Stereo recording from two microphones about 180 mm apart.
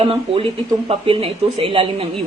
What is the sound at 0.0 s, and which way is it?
A woman's voice, 30° right (ahead or behind).